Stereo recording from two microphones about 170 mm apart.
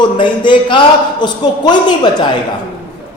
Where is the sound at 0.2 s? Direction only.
30° left (ahead or behind).